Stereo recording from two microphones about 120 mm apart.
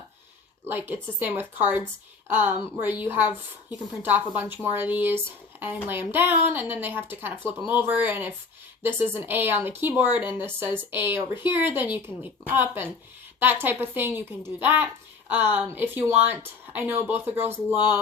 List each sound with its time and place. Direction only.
0.7 s speech: 15° right (ahead or behind)